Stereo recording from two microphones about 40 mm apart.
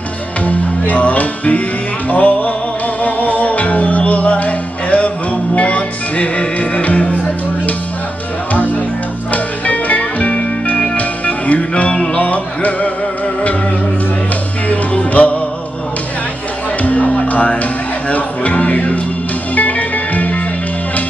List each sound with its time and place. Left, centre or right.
0.5 s music: left
9.3 s music: left
11.7 s music: left
12.2 s music: left
14.7 s music: left
16.8 s music: left